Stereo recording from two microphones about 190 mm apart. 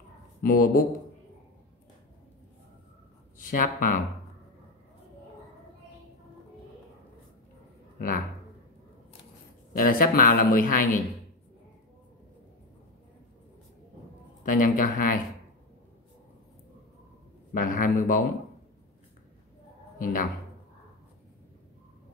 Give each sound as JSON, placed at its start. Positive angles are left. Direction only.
{"t": 0.4, "sound": "a woman's voice", "side_deg": 45}
{"t": 3.3, "sound": "speech", "side_deg": 45}
{"t": 9.8, "sound": "a woman's voice", "side_deg": 50}
{"t": 14.4, "sound": "a woman's voice", "side_deg": 45}
{"t": 17.6, "sound": "a woman's voice", "side_deg": 45}
{"t": 20.0, "sound": "a woman's voice", "side_deg": 45}